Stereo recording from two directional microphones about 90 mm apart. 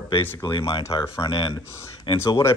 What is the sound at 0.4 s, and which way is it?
Speech, 45° left (ahead or behind).